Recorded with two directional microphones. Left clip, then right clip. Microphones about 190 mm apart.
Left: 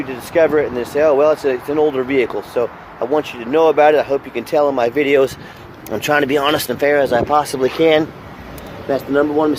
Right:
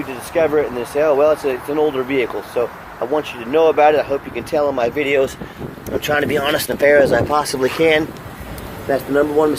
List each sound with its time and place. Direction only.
0.3 s speech: 30° left (ahead or behind)
6.7 s speech: 15° left (ahead or behind)